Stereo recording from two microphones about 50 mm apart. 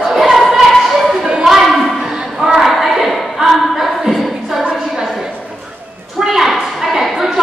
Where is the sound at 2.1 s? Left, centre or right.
Centre.